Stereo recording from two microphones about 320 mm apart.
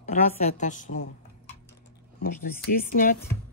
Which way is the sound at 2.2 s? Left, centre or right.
Left.